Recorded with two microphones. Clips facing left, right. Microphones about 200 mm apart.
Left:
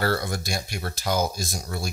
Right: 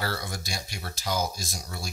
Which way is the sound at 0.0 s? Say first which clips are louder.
Left 7 dB; 55° left (ahead or behind).